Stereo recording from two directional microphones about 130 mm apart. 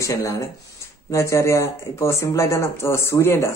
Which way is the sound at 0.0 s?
25° left (ahead or behind).